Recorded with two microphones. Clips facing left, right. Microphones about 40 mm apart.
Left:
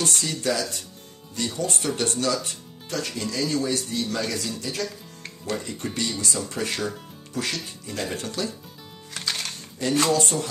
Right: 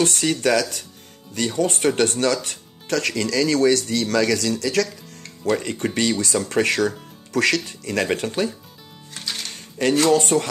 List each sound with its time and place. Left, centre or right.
0.0 s speech: right
5.4 s speech: right
7.3 s speech: right
10.0 s speech: right